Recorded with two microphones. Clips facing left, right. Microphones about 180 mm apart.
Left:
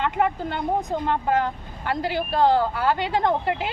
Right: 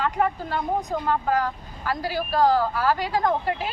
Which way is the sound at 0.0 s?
25° left (ahead or behind).